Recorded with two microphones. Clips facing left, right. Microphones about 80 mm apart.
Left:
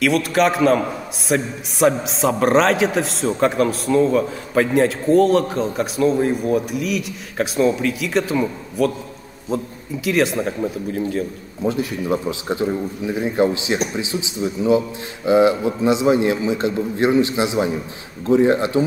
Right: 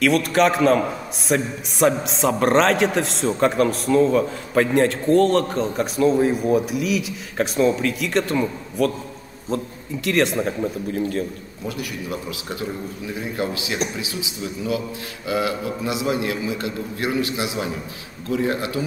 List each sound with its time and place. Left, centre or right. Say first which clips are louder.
0.0 s a man's voice: even; centre
11.6 s a man's voice: left 8 dB; left